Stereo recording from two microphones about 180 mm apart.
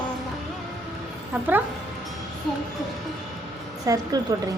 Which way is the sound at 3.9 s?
20° right (ahead or behind).